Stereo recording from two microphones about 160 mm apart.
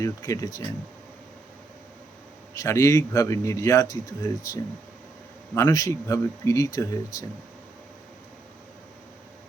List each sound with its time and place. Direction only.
0.0 s speech: 20° left (ahead or behind)
2.6 s speech: 20° left (ahead or behind)